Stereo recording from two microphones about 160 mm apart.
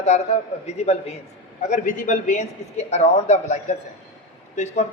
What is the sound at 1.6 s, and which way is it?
A man's voice, 55° left (ahead or behind).